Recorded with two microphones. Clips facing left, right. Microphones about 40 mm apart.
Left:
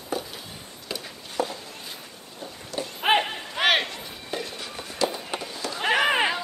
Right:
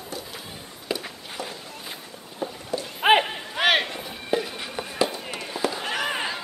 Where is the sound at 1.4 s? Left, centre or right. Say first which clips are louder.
Left 7 dB; left.